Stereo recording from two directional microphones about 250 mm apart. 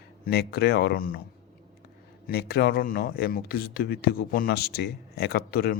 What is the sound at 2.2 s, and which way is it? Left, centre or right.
Speech, left.